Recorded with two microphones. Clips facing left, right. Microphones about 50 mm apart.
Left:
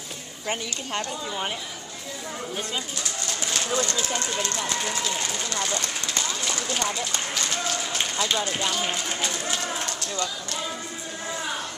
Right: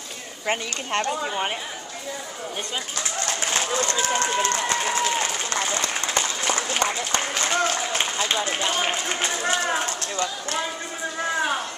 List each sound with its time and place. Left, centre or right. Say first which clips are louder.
0.9 s speech: right 6 dB; right
3.3 s bird: right 2 dB; right
4.3 s speech: right 5 dB; right